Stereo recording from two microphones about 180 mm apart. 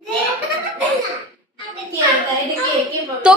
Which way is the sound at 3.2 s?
5° right (ahead or behind).